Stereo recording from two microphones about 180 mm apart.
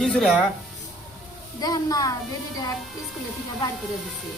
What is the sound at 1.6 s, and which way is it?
Speech, 20° left (ahead or behind).